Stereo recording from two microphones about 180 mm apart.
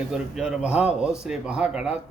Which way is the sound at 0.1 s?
5° right (ahead or behind).